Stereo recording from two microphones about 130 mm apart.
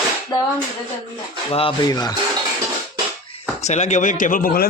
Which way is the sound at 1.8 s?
30° left (ahead or behind).